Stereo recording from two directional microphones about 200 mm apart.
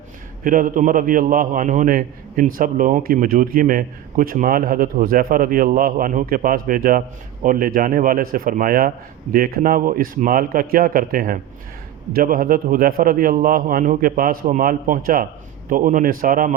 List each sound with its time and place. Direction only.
0.4 s a man's voice: 45° right (ahead or behind)